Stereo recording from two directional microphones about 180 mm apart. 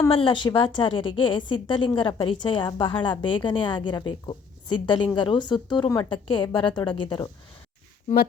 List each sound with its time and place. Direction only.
0.1 s a woman's voice: 30° left (ahead or behind)